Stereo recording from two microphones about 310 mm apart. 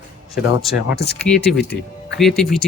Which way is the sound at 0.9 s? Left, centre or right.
Left.